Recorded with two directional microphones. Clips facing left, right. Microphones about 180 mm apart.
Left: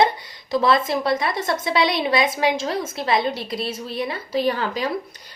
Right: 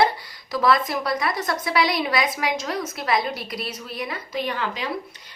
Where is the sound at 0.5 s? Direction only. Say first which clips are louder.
Left 2 dB; 25° left (ahead or behind).